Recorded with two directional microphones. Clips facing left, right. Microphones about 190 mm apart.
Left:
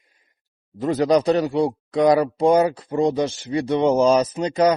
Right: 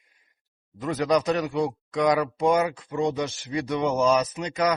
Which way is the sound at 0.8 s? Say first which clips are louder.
Left 5 dB; 35° left (ahead or behind).